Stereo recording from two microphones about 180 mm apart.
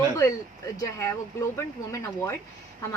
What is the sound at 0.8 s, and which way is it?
Speech, 15° left (ahead or behind).